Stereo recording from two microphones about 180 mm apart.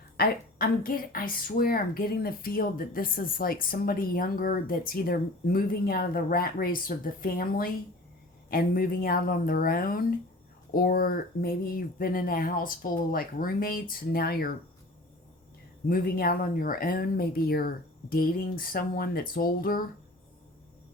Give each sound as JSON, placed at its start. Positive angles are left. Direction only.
{"t": 0.2, "sound": "a woman's voice", "side_deg": 55}
{"t": 15.9, "sound": "a woman's voice", "side_deg": 55}